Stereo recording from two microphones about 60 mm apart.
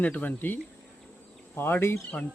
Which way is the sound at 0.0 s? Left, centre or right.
Left.